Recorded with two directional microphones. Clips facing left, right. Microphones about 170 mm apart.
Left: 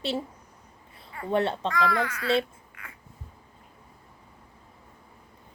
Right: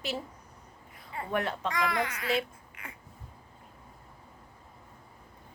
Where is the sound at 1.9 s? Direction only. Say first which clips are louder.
Left 3 dB; 25° right (ahead or behind).